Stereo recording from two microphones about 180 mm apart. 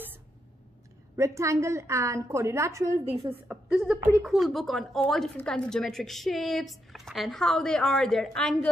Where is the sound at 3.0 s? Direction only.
35° right (ahead or behind).